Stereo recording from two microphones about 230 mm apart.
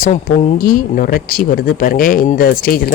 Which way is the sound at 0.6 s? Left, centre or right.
Left.